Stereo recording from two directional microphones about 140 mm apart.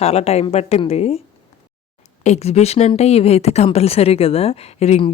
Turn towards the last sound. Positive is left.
turn(degrees=45)  # may be behind; listen again after turning